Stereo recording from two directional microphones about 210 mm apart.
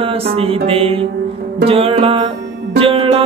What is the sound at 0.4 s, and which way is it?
Music, 25° right (ahead or behind).